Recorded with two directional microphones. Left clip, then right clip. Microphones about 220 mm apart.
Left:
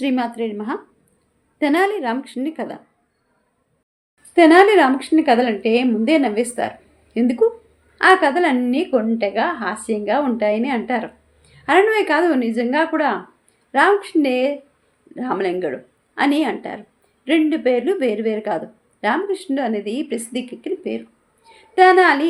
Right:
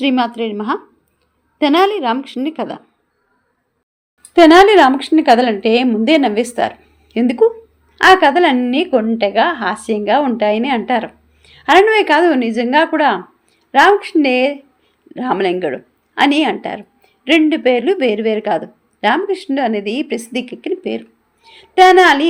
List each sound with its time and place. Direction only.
0.0 s a woman's voice: 30° right (ahead or behind)
4.4 s a woman's voice: 30° right (ahead or behind)